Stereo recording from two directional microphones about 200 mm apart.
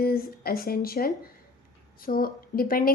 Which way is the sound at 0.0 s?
50° left (ahead or behind).